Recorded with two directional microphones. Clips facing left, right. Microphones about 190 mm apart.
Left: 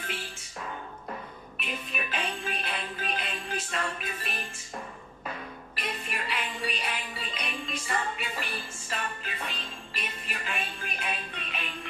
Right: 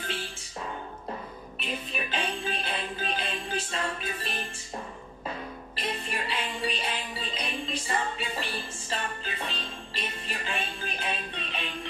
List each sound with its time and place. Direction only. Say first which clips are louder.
1.6 s music: right 2 dB; 30° right (ahead or behind)
5.8 s music: right 2 dB; 30° right (ahead or behind)